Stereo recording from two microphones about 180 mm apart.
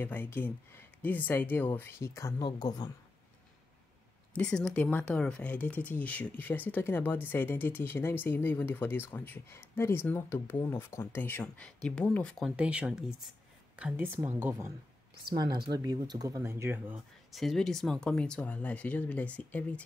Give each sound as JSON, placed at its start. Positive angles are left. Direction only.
{"t": 0.0, "sound": "speech", "side_deg": 10}
{"t": 4.3, "sound": "speech", "side_deg": 5}
{"t": 17.3, "sound": "speech", "side_deg": 0}